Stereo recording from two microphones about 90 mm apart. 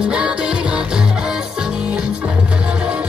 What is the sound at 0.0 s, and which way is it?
Music, 10° right (ahead or behind).